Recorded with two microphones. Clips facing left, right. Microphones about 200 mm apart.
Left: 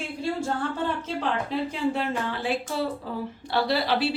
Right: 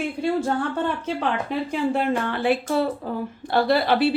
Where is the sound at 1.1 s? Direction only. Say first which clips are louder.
Right 2 dB; 60° right (ahead or behind).